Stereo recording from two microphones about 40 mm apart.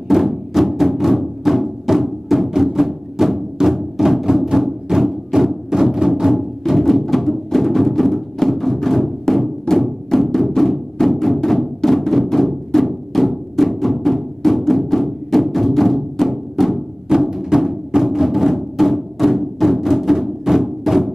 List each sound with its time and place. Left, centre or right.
0.1 s music: centre
6.3 s music: centre
17.3 s music: centre